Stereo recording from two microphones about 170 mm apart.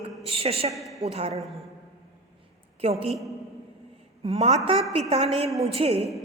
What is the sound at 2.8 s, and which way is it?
Speech, 35° right (ahead or behind).